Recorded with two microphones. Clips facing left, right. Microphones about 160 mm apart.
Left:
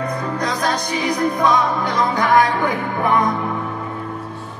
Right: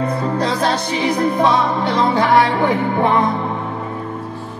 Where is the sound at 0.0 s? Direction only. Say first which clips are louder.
Right 4 dB; 30° right (ahead or behind).